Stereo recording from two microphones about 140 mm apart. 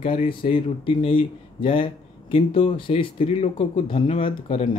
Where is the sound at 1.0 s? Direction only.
40° left (ahead or behind).